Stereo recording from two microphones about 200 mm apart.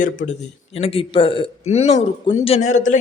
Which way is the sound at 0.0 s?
40° left (ahead or behind).